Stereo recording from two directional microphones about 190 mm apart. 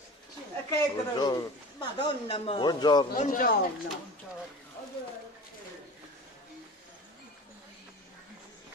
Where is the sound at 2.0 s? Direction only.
25° left (ahead or behind).